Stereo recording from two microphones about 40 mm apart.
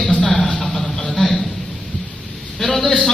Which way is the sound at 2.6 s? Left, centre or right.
Centre.